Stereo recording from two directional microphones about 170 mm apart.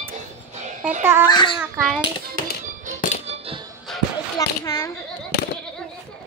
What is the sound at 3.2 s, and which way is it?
Music, 35° right (ahead or behind).